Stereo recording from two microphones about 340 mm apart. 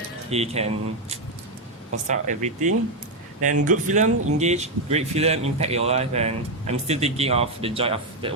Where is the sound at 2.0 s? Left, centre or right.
Right.